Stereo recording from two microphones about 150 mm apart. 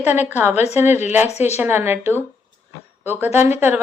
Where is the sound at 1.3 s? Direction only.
45° left (ahead or behind).